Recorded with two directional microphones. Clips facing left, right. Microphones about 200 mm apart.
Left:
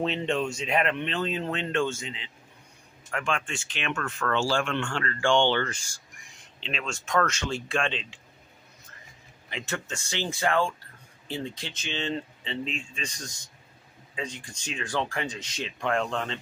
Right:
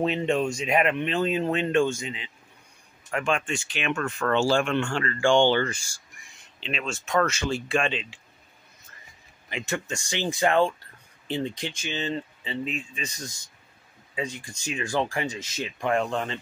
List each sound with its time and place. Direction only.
0.0 s speech: 10° right (ahead or behind)
9.5 s speech: 10° right (ahead or behind)